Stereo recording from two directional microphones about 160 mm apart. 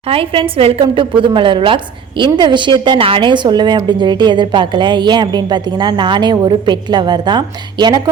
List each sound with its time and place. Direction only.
0.1 s a woman's voice: 35° right (ahead or behind)